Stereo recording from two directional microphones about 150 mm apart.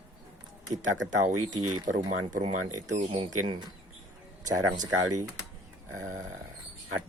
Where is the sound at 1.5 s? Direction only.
30° right (ahead or behind).